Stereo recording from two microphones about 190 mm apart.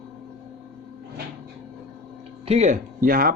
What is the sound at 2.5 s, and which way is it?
Speech, 35° right (ahead or behind).